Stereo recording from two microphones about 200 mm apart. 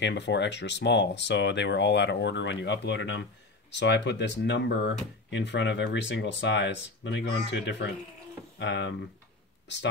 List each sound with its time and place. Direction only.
0.0 s speech: 60° left (ahead or behind)